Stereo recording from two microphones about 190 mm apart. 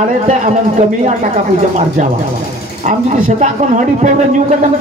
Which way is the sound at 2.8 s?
35° right (ahead or behind).